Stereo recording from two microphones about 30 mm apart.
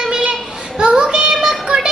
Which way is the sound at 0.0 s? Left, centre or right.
Right.